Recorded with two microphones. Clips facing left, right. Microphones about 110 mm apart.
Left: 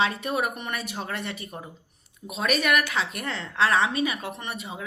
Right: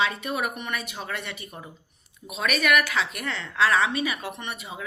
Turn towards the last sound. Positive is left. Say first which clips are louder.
# left 1 dB
turn(degrees=30)  # may be behind; listen again after turning